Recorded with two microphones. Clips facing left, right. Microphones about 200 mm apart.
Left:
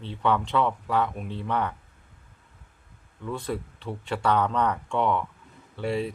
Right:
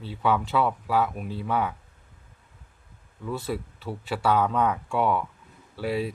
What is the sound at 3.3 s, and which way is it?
Speech, 5° right (ahead or behind).